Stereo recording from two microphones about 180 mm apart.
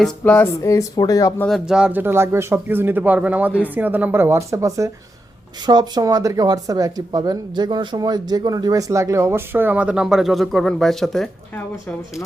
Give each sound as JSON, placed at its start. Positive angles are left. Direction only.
{"t": 0.0, "sound": "speech", "side_deg": 10}
{"t": 1.5, "sound": "speech", "side_deg": 0}